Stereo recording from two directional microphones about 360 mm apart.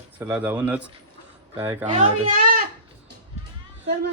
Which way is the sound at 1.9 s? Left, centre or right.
Centre.